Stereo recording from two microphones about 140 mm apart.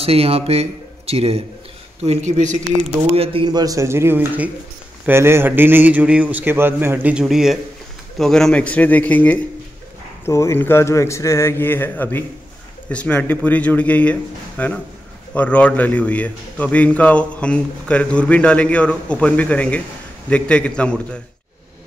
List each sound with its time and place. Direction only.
0.0 s speech: 45° right (ahead or behind)
2.0 s speech: 55° right (ahead or behind)
3.1 s a man's voice: 45° right (ahead or behind)
3.4 s a man's voice: 25° right (ahead or behind); by 21.2 s 5° left (ahead or behind)